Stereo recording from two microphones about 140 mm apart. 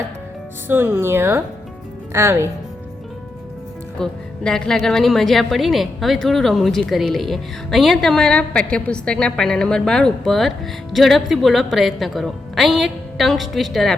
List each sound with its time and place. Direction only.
0.7 s speech: 15° right (ahead or behind)
3.9 s a woman's voice: 5° left (ahead or behind)